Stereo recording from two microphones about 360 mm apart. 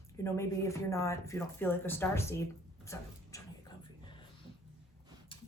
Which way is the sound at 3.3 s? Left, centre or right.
Centre.